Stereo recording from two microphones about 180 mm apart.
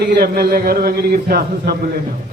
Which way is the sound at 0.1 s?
60° right (ahead or behind).